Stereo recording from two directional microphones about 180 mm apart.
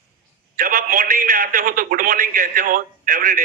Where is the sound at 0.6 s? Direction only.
50° right (ahead or behind).